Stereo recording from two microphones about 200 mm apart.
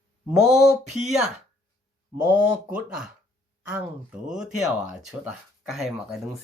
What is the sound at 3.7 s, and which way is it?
Speech, 5° right (ahead or behind).